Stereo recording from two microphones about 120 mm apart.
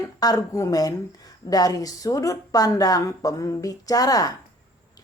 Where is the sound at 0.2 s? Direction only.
30° left (ahead or behind).